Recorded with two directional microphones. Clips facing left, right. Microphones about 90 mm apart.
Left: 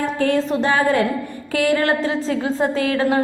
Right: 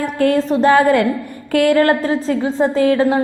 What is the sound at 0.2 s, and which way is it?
A woman's voice, 45° right (ahead or behind).